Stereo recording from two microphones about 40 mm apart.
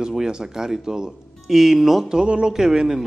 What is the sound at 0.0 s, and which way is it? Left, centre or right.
Speech, centre.